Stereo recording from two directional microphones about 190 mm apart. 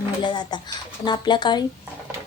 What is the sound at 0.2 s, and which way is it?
Speech, 20° left (ahead or behind).